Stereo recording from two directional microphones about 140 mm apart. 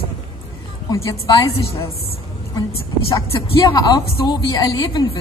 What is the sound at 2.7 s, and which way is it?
Speech, 40° left (ahead or behind).